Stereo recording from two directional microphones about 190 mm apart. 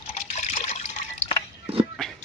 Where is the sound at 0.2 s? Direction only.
40° left (ahead or behind).